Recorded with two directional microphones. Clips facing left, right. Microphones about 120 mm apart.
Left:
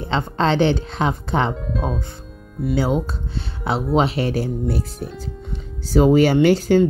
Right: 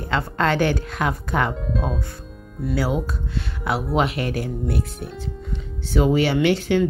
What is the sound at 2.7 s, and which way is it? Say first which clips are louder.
Speech: left 3 dB; 25° left (ahead or behind).